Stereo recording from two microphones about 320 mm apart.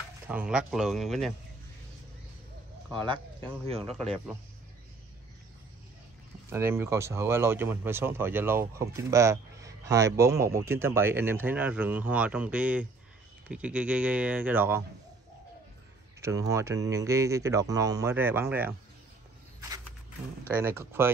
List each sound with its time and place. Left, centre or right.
0.3 s speech: centre
2.9 s speech: centre
6.5 s speech: centre
16.2 s speech: centre
20.6 s speech: centre